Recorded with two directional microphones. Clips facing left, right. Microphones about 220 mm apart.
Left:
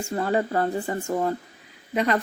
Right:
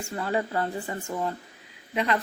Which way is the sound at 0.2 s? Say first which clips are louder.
Left 4 dB; 40° left (ahead or behind).